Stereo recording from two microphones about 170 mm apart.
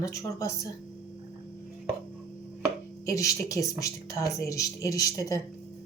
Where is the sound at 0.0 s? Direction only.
20° left (ahead or behind).